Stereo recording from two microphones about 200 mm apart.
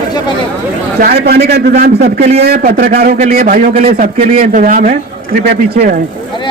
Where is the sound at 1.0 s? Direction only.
50° right (ahead or behind).